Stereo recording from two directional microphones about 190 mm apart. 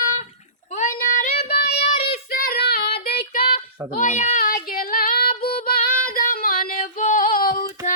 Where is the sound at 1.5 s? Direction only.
55° left (ahead or behind).